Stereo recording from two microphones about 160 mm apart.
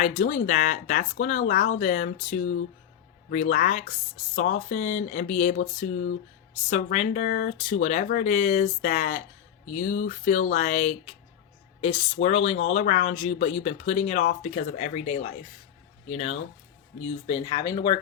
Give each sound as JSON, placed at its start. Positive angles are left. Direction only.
{"t": 0.0, "sound": "speech", "side_deg": 50}